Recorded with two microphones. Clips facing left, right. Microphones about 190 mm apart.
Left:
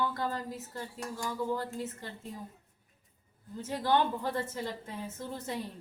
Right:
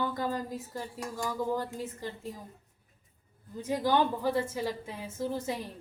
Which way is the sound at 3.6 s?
15° right (ahead or behind).